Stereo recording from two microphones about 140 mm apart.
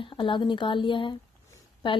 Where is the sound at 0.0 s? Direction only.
35° left (ahead or behind).